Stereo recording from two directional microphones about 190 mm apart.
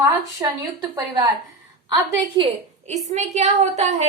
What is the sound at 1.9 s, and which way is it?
A woman's voice, 30° right (ahead or behind).